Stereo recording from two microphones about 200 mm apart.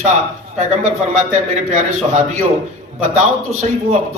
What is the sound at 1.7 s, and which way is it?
A man's voice, 40° right (ahead or behind).